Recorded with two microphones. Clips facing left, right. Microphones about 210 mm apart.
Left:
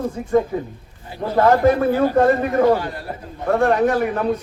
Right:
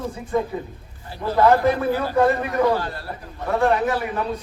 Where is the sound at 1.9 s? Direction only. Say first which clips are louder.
Left 4 dB; 50° left (ahead or behind).